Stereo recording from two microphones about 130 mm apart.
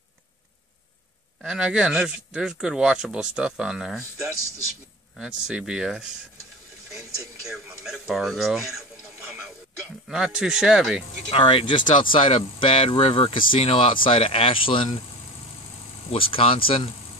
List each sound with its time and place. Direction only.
1.4 s speech: 5° right (ahead or behind)
7.4 s speech: centre (ahead or behind)
10.0 s speech: 5° right (ahead or behind)
11.2 s speech: 40° left (ahead or behind)
16.1 s speech: 45° left (ahead or behind)